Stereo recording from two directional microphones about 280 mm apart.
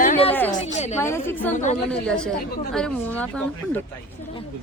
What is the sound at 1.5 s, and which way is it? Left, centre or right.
Speech, left.